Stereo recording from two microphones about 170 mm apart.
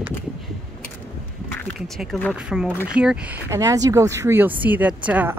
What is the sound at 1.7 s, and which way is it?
Speech, centre (ahead or behind).